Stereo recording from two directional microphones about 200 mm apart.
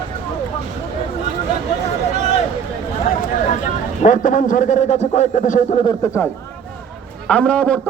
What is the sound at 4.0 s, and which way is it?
A man's voice, 40° left (ahead or behind).